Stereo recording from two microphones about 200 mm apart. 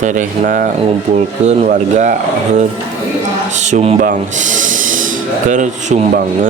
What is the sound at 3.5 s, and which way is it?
Speech, 35° right (ahead or behind).